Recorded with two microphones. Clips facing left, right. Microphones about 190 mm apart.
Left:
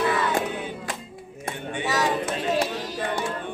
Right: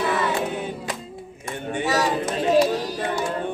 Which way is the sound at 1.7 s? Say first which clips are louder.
Right 3 dB; 40° right (ahead or behind).